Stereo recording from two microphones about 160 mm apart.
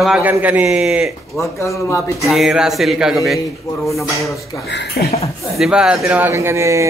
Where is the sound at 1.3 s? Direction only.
20° left (ahead or behind).